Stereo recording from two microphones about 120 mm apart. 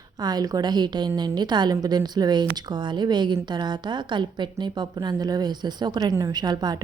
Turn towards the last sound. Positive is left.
turn(degrees=-35)  # may be behind; listen again after turning